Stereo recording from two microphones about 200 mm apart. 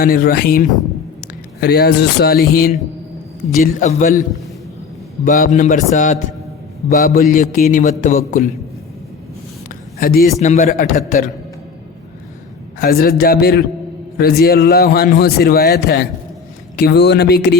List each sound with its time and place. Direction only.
0.0 s a man's voice: 50° left (ahead or behind)
5.2 s a man's voice: 40° left (ahead or behind)
10.0 s a man's voice: 45° left (ahead or behind)
12.8 s a man's voice: 50° left (ahead or behind)